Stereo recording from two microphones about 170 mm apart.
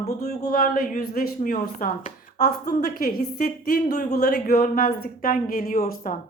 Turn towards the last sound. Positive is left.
turn(degrees=55)  # may be behind; listen again after turning